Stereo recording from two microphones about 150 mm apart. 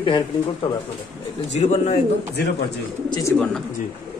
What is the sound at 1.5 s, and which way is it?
Speech, 50° left (ahead or behind).